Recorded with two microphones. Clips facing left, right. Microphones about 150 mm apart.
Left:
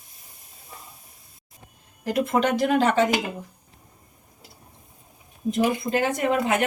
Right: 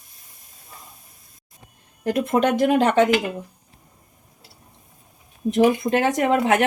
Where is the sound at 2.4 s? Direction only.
55° right (ahead or behind).